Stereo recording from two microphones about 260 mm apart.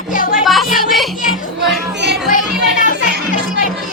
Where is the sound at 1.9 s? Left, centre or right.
Right.